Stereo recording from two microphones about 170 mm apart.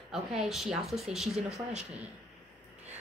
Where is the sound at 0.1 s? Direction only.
Centre (ahead or behind).